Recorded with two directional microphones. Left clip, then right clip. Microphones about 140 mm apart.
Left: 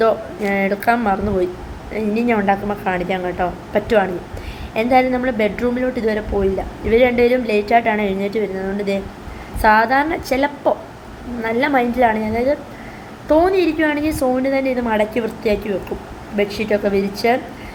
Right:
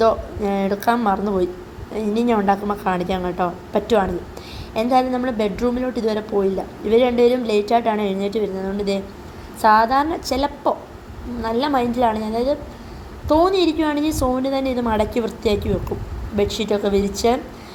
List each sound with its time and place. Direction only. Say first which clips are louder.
0.0 s a woman's voice: left 1 dB; 30° right (ahead or behind)